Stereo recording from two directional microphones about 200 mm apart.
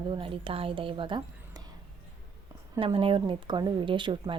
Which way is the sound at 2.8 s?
25° right (ahead or behind).